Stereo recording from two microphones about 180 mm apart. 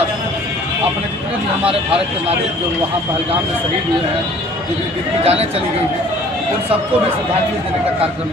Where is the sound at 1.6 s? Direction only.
30° right (ahead or behind).